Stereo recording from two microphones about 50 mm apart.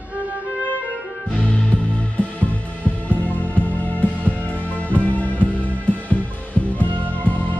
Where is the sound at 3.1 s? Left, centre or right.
Left.